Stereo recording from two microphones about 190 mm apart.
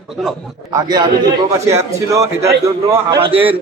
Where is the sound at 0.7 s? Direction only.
20° right (ahead or behind).